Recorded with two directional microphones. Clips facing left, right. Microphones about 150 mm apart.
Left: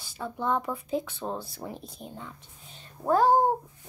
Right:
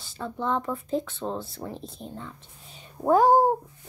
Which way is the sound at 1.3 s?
25° right (ahead or behind).